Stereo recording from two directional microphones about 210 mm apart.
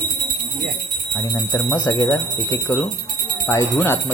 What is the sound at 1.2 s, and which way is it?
Speech, 20° left (ahead or behind).